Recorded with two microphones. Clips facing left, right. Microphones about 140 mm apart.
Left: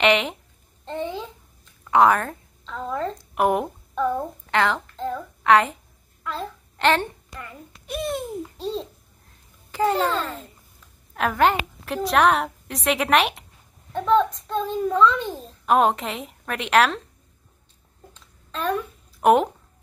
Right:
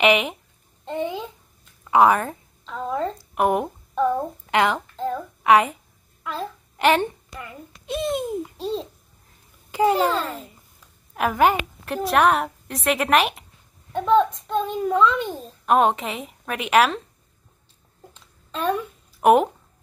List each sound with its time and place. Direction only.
0.0 s a child's voice: 5° right (ahead or behind)
0.8 s babbling: 10° right (ahead or behind)
1.9 s a woman's voice: 5° right (ahead or behind)
8.5 s a child's voice: centre (ahead or behind)
9.7 s a child's voice: 10° right (ahead or behind)
18.5 s a sound: 10° right (ahead or behind)